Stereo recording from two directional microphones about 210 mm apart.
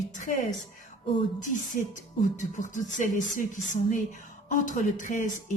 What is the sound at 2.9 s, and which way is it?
A woman's voice, 35° left (ahead or behind).